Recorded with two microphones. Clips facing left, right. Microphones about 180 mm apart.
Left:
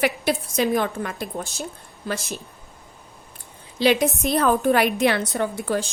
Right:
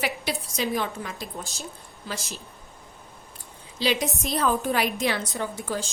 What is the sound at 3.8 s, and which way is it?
A woman's voice, 55° left (ahead or behind).